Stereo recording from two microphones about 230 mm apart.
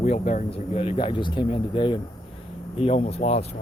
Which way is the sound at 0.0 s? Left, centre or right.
Left.